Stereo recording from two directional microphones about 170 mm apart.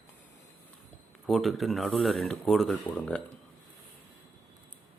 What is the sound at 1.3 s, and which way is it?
Speech, centre (ahead or behind).